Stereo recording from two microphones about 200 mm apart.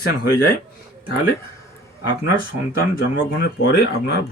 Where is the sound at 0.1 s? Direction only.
50° left (ahead or behind).